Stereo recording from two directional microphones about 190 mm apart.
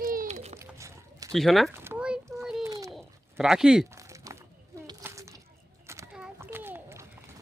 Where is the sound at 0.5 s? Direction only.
15° right (ahead or behind).